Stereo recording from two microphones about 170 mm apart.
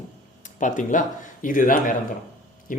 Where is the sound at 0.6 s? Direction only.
50° left (ahead or behind).